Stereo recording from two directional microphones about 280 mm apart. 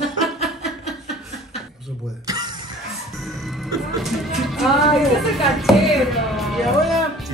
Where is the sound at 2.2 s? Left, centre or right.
Centre.